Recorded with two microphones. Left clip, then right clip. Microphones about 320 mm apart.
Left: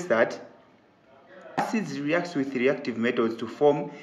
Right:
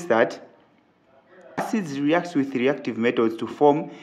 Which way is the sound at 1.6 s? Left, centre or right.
Right.